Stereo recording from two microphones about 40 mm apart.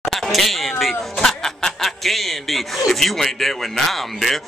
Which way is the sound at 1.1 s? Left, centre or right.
Centre.